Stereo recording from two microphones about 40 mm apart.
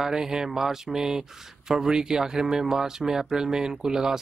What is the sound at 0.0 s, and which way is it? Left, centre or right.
Speech, centre.